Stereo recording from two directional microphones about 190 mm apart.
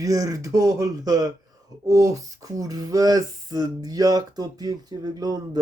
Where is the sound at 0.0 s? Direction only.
20° right (ahead or behind).